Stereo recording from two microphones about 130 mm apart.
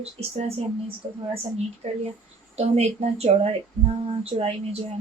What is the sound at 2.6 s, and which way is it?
Speech, 55° right (ahead or behind).